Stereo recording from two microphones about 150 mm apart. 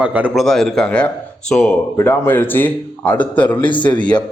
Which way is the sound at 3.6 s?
30° left (ahead or behind).